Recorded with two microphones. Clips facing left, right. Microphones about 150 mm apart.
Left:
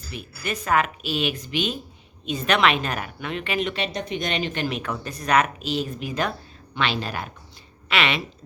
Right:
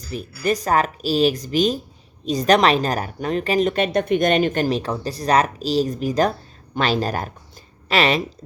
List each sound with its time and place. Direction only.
0.1 s a woman's voice: 35° right (ahead or behind)